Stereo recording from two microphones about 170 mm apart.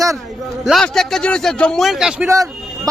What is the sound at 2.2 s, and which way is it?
Speech, 20° right (ahead or behind).